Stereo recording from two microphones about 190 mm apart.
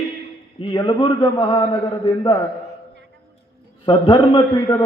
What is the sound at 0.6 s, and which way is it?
A man's voice, 25° left (ahead or behind).